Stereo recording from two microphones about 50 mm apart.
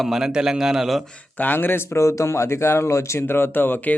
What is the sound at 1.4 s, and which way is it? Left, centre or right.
Speech, left.